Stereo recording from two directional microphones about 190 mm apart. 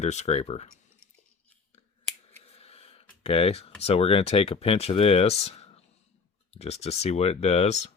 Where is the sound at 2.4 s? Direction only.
35° left (ahead or behind).